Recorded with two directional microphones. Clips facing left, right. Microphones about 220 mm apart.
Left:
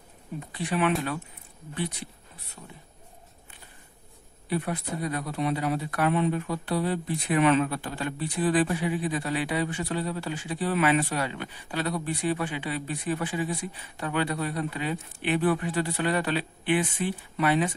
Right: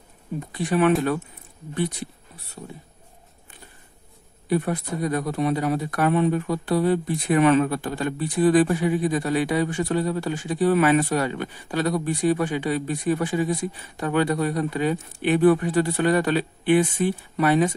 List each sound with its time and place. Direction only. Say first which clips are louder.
0.5 s speech: right 6 dB; 45° right (ahead or behind)
2.6 s speech: right 9 dB; 35° right (ahead or behind)
4.5 s speech: right 6 dB; 45° right (ahead or behind)